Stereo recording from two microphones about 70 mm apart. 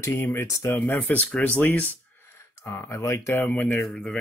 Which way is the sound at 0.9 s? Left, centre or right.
Left.